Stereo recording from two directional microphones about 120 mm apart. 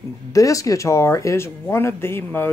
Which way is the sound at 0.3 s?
30° left (ahead or behind).